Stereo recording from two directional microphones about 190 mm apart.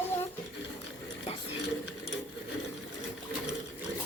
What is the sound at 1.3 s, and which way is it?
Cutlery, 30° left (ahead or behind).